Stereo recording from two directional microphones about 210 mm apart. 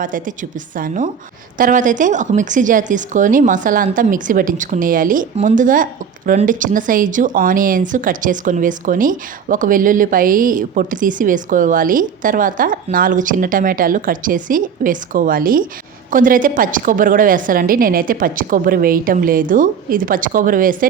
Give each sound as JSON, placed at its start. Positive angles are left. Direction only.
{"t": 0.0, "sound": "a woman's voice", "side_deg": -40}